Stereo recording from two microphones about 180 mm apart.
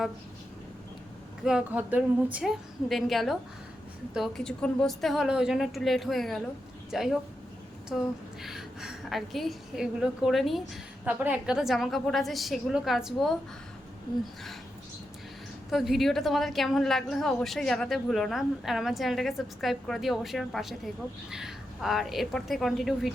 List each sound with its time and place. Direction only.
1.5 s a woman's voice: 5° right (ahead or behind)
15.7 s a woman's voice: centre (ahead or behind)